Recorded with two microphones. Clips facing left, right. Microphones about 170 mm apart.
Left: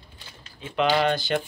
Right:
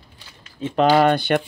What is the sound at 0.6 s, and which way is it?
Speech, 40° right (ahead or behind).